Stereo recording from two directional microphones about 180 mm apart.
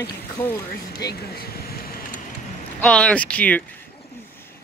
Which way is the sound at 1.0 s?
60° left (ahead or behind).